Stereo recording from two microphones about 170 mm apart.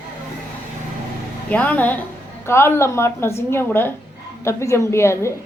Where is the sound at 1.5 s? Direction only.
10° left (ahead or behind).